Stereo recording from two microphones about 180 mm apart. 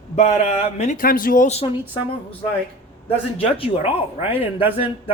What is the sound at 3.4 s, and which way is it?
Speech, 30° left (ahead or behind).